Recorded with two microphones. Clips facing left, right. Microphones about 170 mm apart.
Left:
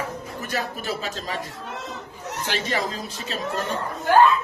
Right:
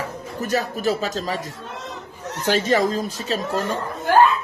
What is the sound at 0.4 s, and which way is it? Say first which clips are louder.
Speech: right 8 dB; 40° right (ahead or behind).